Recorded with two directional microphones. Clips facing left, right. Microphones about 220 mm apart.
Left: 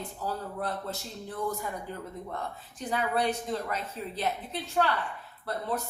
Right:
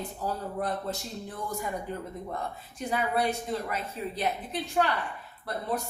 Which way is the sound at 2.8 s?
10° right (ahead or behind).